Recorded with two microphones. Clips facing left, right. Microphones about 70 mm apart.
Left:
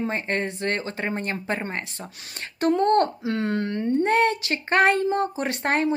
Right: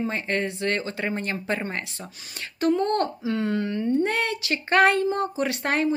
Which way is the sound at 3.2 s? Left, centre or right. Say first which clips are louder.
Even; left.